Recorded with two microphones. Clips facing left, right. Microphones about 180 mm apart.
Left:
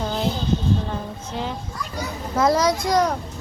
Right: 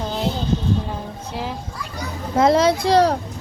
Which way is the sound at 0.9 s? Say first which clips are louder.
Even; 5° right (ahead or behind).